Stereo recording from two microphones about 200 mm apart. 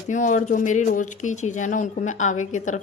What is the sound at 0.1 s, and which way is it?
Speech, 40° left (ahead or behind).